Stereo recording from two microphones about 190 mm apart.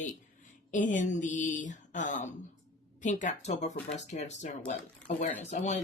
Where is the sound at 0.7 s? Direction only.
40° left (ahead or behind).